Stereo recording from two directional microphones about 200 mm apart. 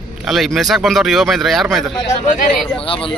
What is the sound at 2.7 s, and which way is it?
Speech, 25° left (ahead or behind).